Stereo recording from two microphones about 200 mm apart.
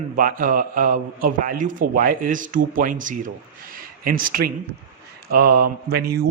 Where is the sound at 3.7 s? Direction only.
45° right (ahead or behind).